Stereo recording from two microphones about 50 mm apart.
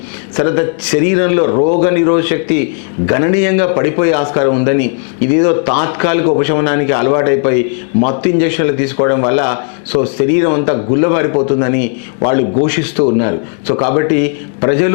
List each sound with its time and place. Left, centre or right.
0.3 s a man's voice: centre
13.1 s a man's voice: centre